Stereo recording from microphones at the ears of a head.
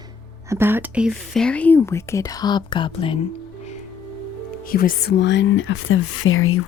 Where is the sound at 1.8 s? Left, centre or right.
Left.